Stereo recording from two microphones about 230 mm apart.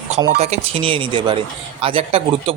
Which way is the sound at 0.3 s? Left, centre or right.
Right.